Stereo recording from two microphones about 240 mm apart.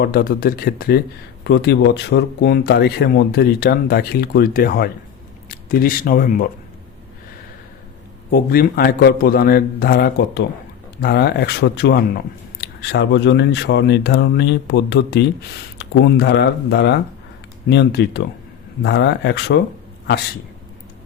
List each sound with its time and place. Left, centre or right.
0.0 s speech: left
8.3 s speech: left